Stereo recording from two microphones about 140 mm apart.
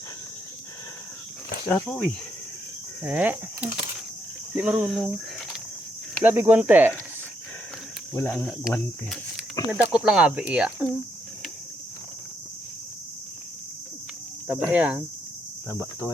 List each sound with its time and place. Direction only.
1.6 s speech: 10° left (ahead or behind)
3.0 s speech: 10° right (ahead or behind)
6.2 s speech: 15° right (ahead or behind)
8.1 s speech: 5° left (ahead or behind); by 10.8 s 10° right (ahead or behind)
14.4 s speech: 10° right (ahead or behind)
15.7 s speech: 20° left (ahead or behind)